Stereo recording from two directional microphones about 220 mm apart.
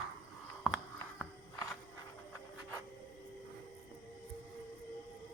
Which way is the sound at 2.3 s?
15° left (ahead or behind).